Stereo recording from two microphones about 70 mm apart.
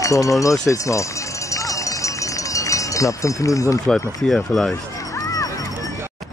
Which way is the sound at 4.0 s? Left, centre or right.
Left.